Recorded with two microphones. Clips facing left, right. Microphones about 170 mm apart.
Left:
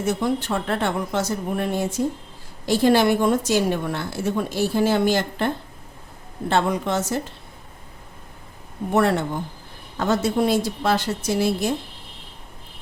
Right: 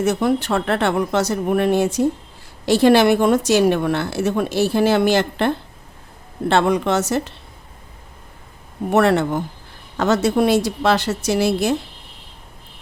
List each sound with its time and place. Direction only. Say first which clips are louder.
0.0 s a woman's voice: right 5 dB; 70° right (ahead or behind)
6.5 s a woman's voice: right 4 dB; 75° right (ahead or behind)
8.9 s a woman's voice: right 4 dB; 75° right (ahead or behind)